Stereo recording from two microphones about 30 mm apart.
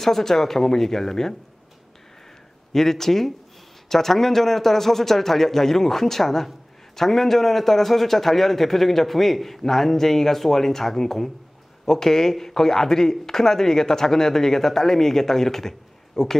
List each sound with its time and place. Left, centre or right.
0.0 s speech: centre
2.7 s speech: centre